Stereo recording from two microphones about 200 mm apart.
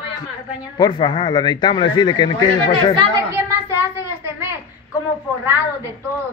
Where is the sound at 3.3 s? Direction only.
10° right (ahead or behind).